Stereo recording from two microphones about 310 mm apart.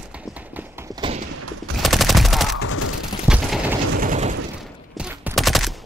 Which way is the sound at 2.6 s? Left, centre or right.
Left.